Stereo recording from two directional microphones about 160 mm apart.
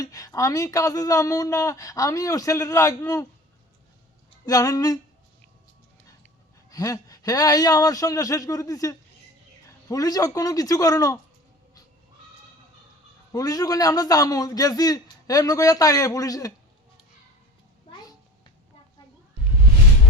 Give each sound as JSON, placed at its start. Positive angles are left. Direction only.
{"t": 0.0, "sound": "speech", "side_deg": 20}
{"t": 4.4, "sound": "speech", "side_deg": 20}
{"t": 6.7, "sound": "speech", "side_deg": 20}
{"t": 13.3, "sound": "speech", "side_deg": 25}